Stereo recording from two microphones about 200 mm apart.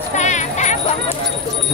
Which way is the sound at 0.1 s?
35° left (ahead or behind).